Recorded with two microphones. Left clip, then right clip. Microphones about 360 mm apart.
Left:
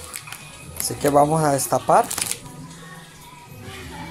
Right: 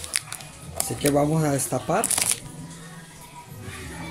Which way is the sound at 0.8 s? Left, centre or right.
Left.